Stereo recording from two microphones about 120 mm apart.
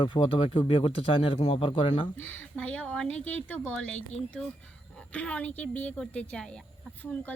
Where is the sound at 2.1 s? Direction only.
15° left (ahead or behind).